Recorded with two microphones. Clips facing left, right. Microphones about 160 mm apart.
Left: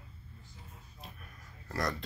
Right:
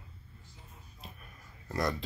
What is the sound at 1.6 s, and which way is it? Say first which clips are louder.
Speech: right 2 dB; centre (ahead or behind).